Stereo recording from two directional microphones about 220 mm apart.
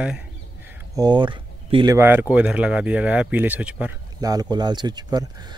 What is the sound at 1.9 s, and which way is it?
Speech, 10° right (ahead or behind).